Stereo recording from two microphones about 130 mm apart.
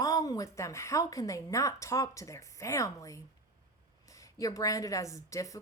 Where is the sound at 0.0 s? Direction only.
25° left (ahead or behind).